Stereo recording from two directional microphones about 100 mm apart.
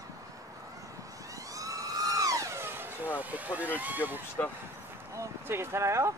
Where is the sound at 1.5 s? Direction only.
35° right (ahead or behind); by 3.1 s 20° right (ahead or behind).